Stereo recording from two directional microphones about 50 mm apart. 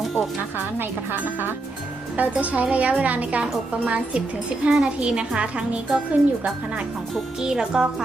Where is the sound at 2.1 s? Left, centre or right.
Right.